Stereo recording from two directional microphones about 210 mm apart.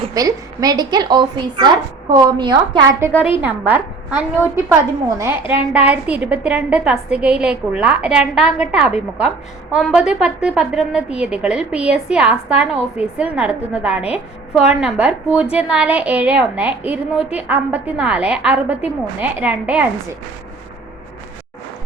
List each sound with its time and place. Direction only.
0.1 s a woman's voice: 15° right (ahead or behind)
3.7 s a woman's voice: 10° right (ahead or behind)